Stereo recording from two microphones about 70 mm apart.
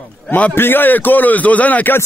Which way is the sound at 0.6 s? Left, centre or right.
Left.